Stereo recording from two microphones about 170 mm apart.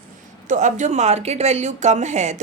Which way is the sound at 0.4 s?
45° right (ahead or behind).